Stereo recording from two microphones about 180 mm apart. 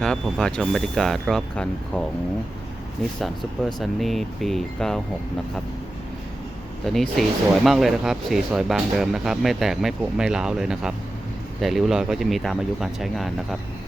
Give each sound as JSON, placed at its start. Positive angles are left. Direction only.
{"t": 0.0, "sound": "speech", "side_deg": 5}
{"t": 6.8, "sound": "speech", "side_deg": 0}